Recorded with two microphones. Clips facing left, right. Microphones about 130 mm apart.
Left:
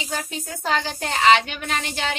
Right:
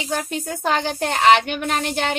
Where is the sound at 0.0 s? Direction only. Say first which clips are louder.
Right 5 dB; 55° right (ahead or behind).